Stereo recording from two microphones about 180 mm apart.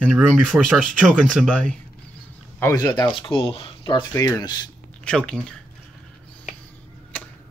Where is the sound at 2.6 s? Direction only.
20° left (ahead or behind).